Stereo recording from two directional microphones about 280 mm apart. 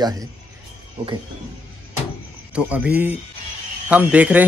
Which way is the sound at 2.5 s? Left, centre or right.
Centre.